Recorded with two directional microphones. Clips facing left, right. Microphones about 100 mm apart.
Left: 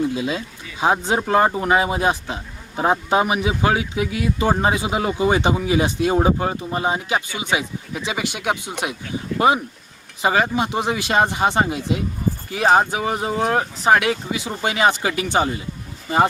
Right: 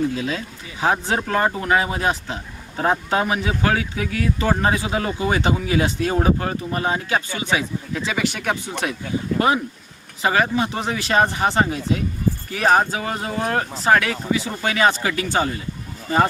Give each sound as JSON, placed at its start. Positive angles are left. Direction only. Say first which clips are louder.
{"t": 0.2, "sound": "speech", "louder": "left 1 dB", "side_deg": 15}
{"t": 9.3, "sound": "speech", "louder": "left 1 dB", "side_deg": -40}
{"t": 10.2, "sound": "speech", "louder": "even", "side_deg": 20}